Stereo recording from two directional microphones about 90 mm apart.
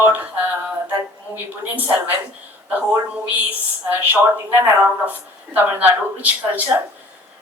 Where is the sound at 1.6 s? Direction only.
20° right (ahead or behind).